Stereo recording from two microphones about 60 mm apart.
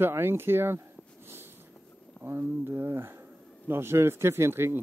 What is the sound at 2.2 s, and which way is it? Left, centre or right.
Speech, right.